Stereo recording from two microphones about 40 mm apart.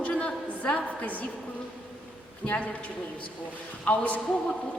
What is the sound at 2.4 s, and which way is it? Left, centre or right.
A man's voice, left.